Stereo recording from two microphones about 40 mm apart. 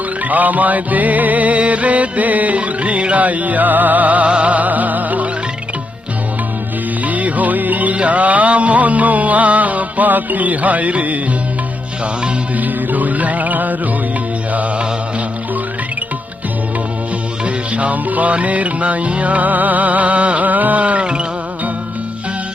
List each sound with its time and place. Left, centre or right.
0.3 s music: right
2.6 s music: right
7.0 s music: right
12.5 s music: right
17.4 s music: right